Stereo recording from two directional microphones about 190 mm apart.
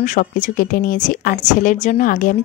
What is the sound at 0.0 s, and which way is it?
Speech, 40° left (ahead or behind).